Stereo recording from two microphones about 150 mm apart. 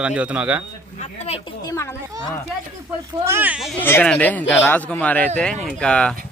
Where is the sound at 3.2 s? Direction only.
15° right (ahead or behind).